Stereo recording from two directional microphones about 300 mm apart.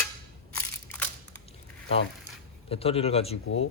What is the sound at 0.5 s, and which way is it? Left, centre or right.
Crushing, centre.